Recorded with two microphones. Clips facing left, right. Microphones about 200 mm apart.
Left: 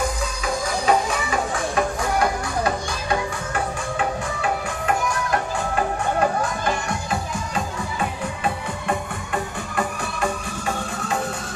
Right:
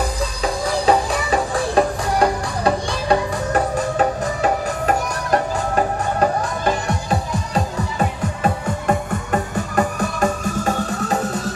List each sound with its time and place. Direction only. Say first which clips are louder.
0.0 s music: right 3 dB; 35° right (ahead or behind)
8.8 s music: right 5 dB; 40° right (ahead or behind)